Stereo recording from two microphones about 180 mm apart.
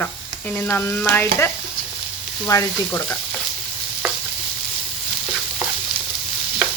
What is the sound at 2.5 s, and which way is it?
Stir, 15° left (ahead or behind).